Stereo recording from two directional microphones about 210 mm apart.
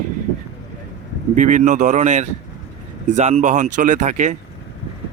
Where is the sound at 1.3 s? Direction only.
35° right (ahead or behind).